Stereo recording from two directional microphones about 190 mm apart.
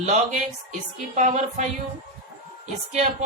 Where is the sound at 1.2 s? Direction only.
40° right (ahead or behind).